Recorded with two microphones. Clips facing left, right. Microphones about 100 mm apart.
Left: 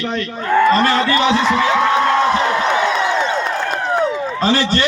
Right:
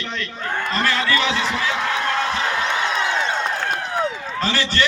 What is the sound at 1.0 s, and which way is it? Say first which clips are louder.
Speech: left 6 dB; 30° left (ahead or behind).